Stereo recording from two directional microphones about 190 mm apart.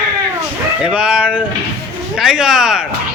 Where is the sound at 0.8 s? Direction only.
5° right (ahead or behind).